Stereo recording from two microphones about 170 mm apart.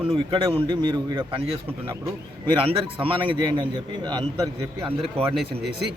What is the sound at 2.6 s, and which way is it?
Speech, 30° right (ahead or behind).